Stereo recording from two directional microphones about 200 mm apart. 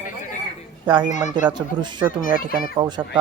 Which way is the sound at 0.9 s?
25° right (ahead or behind).